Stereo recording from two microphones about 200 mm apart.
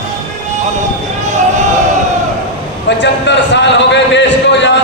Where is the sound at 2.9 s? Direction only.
60° left (ahead or behind).